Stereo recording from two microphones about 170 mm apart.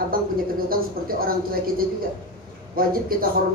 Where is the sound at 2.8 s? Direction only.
60° right (ahead or behind).